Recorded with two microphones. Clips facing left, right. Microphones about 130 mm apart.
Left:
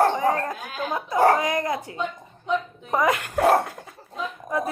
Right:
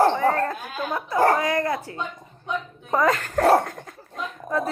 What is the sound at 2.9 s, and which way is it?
Speech, 15° left (ahead or behind).